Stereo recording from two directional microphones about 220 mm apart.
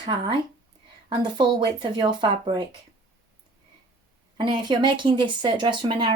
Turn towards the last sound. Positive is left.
turn(degrees=-20)  # may be behind; listen again after turning